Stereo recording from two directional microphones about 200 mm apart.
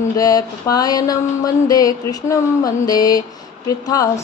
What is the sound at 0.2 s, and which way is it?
Mantra, 20° left (ahead or behind).